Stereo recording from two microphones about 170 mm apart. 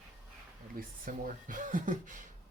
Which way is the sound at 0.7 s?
55° right (ahead or behind).